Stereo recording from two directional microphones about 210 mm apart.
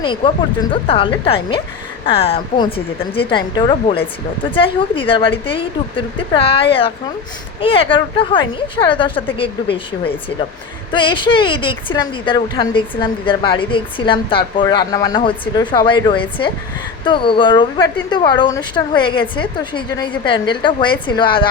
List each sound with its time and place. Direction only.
0.0 s a woman's voice: 20° left (ahead or behind)